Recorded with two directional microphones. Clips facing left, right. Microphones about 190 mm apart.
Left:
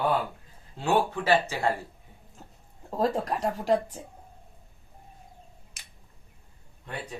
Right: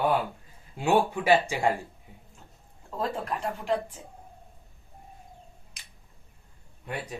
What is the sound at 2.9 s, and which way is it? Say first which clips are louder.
Speech: left 4 dB; 40° left (ahead or behind).